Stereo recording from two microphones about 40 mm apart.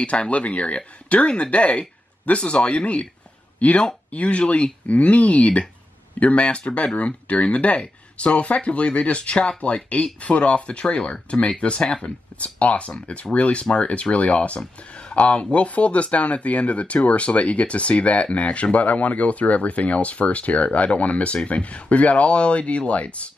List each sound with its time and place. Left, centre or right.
0.0 s speech: left